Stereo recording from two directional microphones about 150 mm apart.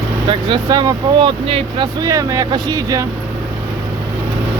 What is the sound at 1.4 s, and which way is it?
Speech, 40° right (ahead or behind).